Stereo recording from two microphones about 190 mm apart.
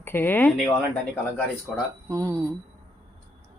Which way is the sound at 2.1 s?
20° right (ahead or behind).